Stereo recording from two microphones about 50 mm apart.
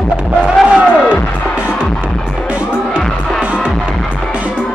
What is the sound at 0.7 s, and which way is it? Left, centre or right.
Music, right.